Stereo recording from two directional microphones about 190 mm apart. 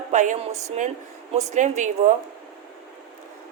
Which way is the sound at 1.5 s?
40° right (ahead or behind).